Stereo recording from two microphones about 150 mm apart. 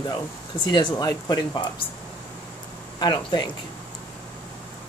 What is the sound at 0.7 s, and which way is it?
Speech, 30° left (ahead or behind).